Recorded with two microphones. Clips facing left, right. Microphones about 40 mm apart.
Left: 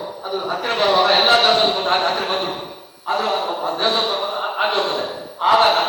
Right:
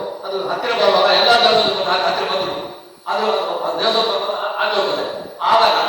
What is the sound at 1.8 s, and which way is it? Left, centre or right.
Speech, left.